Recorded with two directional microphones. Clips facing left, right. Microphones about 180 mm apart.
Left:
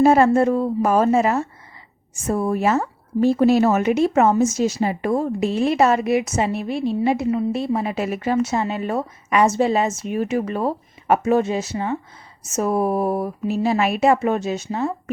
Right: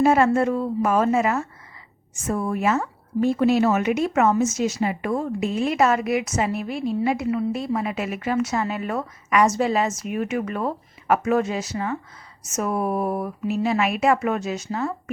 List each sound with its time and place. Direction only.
0.0 s a woman's voice: 35° left (ahead or behind)